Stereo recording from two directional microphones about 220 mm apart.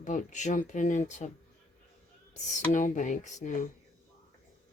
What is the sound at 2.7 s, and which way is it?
Speech, 35° left (ahead or behind).